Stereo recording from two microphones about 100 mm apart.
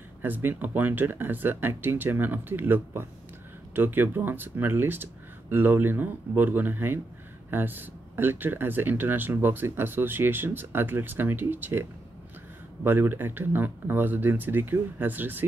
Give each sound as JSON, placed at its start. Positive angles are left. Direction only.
{"t": 0.2, "sound": "speech", "side_deg": -20}